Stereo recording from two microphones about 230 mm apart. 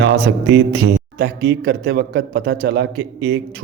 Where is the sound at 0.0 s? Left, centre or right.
Right.